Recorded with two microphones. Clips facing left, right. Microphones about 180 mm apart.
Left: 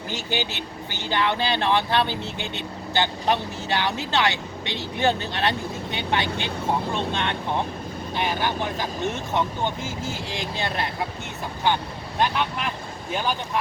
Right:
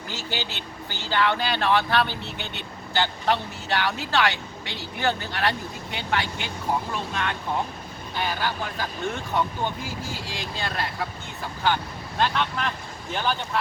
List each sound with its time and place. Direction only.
0.1 s speech: 20° left (ahead or behind)
12.2 s speech: 15° left (ahead or behind)